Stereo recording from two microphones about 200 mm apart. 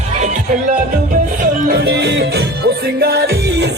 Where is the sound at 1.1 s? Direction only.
50° right (ahead or behind).